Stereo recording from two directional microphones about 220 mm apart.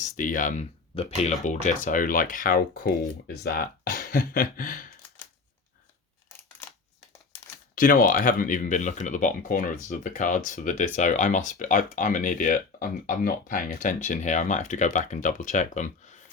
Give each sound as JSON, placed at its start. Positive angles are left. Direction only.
{"t": 0.0, "sound": "speech", "side_deg": 35}
{"t": 7.8, "sound": "speech", "side_deg": 40}